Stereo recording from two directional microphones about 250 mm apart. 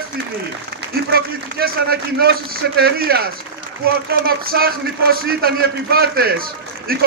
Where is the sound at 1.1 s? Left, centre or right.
Right.